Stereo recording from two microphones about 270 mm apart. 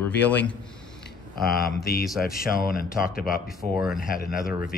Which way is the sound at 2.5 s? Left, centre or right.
Left.